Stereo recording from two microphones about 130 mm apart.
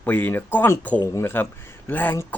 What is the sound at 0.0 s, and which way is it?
Speech, 15° left (ahead or behind).